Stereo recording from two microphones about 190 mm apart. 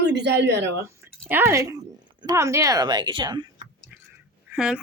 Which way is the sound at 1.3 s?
10° right (ahead or behind).